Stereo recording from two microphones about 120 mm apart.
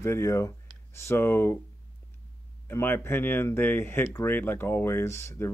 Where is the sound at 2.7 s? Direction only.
20° left (ahead or behind).